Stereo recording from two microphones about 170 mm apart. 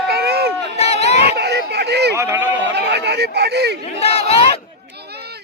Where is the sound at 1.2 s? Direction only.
75° right (ahead or behind).